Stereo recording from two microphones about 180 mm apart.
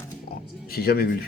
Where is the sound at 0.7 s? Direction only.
60° left (ahead or behind).